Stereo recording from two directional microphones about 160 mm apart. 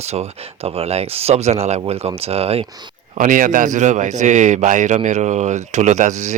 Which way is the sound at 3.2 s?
55° right (ahead or behind).